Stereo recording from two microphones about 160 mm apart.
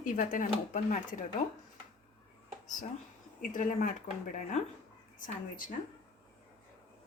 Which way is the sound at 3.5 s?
55° left (ahead or behind).